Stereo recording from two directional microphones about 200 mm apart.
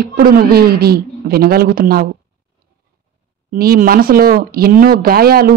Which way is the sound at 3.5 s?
45° right (ahead or behind).